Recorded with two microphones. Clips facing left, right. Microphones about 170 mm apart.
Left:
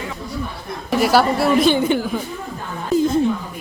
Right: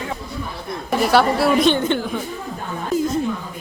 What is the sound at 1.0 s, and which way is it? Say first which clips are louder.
A woman's voice: even; centre (ahead or behind).